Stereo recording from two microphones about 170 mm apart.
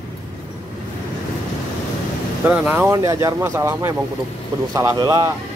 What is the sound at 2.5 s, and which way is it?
Speech, 10° right (ahead or behind).